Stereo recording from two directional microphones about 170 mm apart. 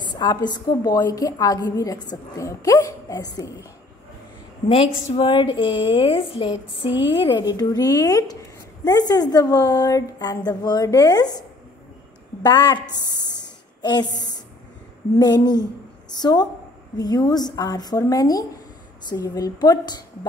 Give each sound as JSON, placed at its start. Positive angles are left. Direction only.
{"t": 0.0, "sound": "a woman's voice", "side_deg": 25}
{"t": 5.1, "sound": "a woman's voice", "side_deg": 30}
{"t": 12.4, "sound": "a woman's voice", "side_deg": 25}